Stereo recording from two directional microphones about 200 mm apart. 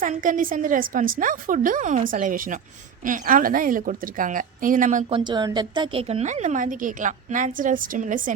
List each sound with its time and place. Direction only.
0.0 s a woman's voice: 40° right (ahead or behind)